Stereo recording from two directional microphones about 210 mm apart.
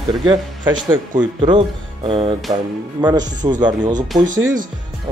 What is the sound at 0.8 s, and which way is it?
Speech, 20° right (ahead or behind).